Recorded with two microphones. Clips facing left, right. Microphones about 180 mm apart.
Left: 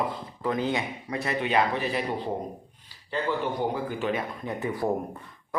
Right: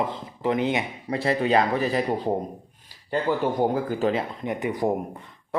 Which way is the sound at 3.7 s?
40° right (ahead or behind).